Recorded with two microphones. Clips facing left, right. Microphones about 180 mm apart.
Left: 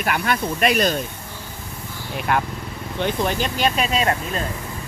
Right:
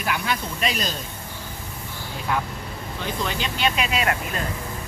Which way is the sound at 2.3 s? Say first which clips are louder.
Left 4 dB; 65° left (ahead or behind).